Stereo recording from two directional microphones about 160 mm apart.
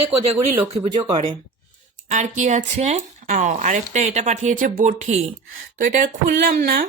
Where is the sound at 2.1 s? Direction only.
50° right (ahead or behind).